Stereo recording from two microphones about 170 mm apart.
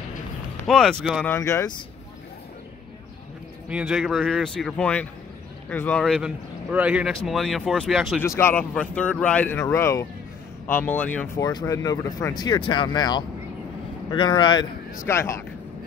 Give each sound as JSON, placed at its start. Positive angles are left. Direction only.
{"t": 0.7, "sound": "speech", "side_deg": 0}
{"t": 1.2, "sound": "speech", "side_deg": 15}
{"t": 3.6, "sound": "speech", "side_deg": -5}
{"t": 8.2, "sound": "speech", "side_deg": 15}
{"t": 11.4, "sound": "speech", "side_deg": 20}